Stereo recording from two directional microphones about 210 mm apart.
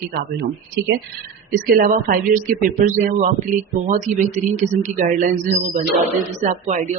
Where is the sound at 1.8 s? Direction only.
40° right (ahead or behind).